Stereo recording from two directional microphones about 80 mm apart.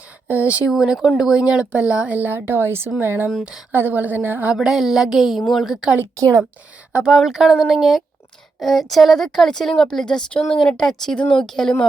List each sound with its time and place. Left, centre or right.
0.3 s a woman's voice: centre
0.7 s a woman's voice: centre; by 3.2 s right
3.2 s speech: centre
3.7 s a woman's voice: right
4.5 s a woman's voice: centre
6.1 s a woman's voice: right
6.9 s a woman's voice: centre